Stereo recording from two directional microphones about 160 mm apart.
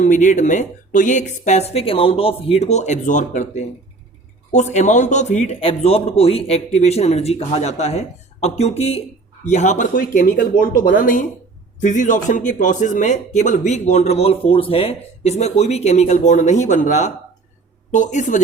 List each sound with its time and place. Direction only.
0.0 s a man's voice: 50° left (ahead or behind)